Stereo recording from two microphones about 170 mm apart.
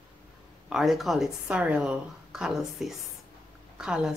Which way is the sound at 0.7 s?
Centre (ahead or behind).